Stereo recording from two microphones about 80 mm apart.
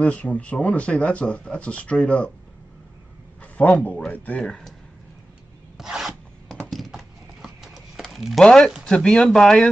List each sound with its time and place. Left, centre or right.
0.0 s speech: centre
3.6 s speech: centre
4.4 s speech: centre
5.8 s filing: centre
6.7 s a sound: centre
8.5 s speech: centre